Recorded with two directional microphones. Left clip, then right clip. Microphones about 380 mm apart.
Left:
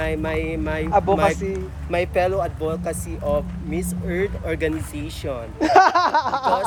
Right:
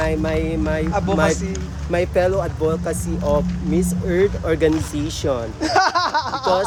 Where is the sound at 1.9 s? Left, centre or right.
Centre.